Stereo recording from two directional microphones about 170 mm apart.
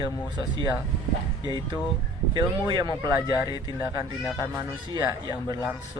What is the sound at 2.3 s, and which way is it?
Speech, 25° right (ahead or behind).